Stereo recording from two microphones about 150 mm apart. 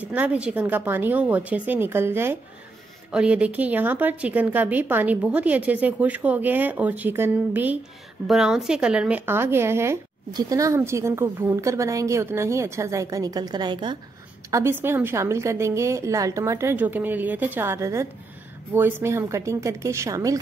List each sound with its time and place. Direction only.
0.0 s a woman's voice: 10° right (ahead or behind); by 13.9 s 30° right (ahead or behind)
14.5 s a woman's voice: 15° right (ahead or behind)